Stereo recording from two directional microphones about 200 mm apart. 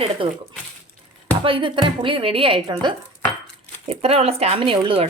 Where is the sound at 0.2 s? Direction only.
25° right (ahead or behind).